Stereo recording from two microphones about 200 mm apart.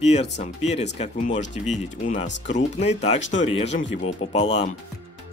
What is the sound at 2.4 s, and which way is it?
Speech, 35° left (ahead or behind).